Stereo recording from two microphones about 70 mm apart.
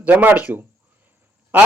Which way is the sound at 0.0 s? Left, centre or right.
Right.